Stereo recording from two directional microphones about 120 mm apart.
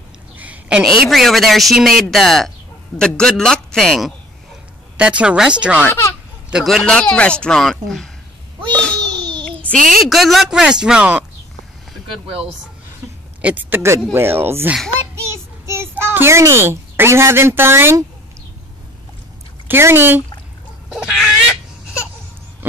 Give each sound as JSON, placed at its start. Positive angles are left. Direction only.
{"t": 0.4, "sound": "a man's voice", "side_deg": -10}
{"t": 4.9, "sound": "a woman's voice", "side_deg": -10}
{"t": 5.9, "sound": "a child's voice", "side_deg": 25}
{"t": 6.5, "sound": "a man's voice", "side_deg": 0}
{"t": 8.7, "sound": "a sound", "side_deg": 10}
{"t": 10.0, "sound": "a man's voice", "side_deg": 0}
{"t": 13.4, "sound": "a child's voice", "side_deg": -10}
{"t": 19.7, "sound": "speech", "side_deg": -20}
{"t": 20.9, "sound": "a man's voice", "side_deg": -5}